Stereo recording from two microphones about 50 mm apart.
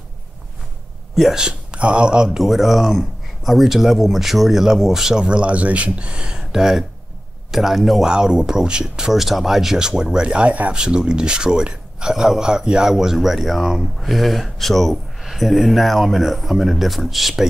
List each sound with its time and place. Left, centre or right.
1.3 s speech: centre
5.2 s speech: right; by 8.1 s centre
8.1 s speech: centre
10.7 s speech: centre